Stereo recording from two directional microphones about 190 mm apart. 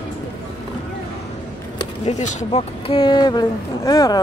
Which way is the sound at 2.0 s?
35° left (ahead or behind).